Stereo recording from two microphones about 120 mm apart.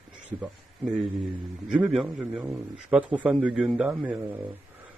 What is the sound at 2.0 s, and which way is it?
A man's voice, 5° right (ahead or behind).